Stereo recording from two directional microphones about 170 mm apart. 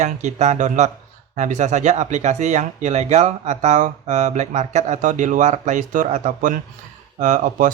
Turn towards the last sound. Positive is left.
turn(degrees=-50)  # may be behind; listen again after turning